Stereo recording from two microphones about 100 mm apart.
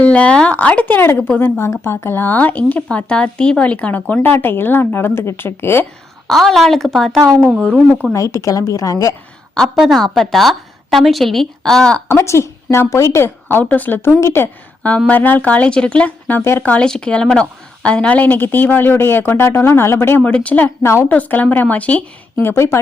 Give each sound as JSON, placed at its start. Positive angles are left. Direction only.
{"t": 0.0, "sound": "speech", "side_deg": 10}
{"t": 6.2, "sound": "a woman's voice", "side_deg": 0}
{"t": 8.1, "sound": "a woman's voice", "side_deg": 30}
{"t": 9.7, "sound": "a woman's voice", "side_deg": 0}
{"t": 12.0, "sound": "speech", "side_deg": 30}
{"t": 14.8, "sound": "speech", "side_deg": 10}
{"t": 16.6, "sound": "speech", "side_deg": 10}
{"t": 20.8, "sound": "speech", "side_deg": 30}
{"t": 21.1, "sound": "speech", "side_deg": 15}